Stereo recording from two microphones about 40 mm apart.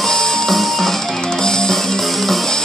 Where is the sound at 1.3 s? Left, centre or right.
Centre.